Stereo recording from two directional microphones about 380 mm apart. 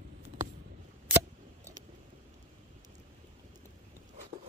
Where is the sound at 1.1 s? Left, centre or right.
Centre.